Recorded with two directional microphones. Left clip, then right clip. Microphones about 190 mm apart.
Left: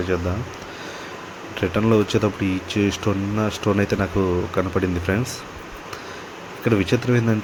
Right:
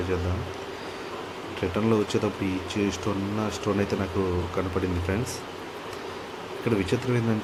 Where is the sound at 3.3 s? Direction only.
20° left (ahead or behind).